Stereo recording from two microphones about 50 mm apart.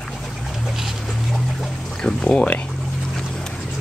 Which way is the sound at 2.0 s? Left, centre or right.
Left.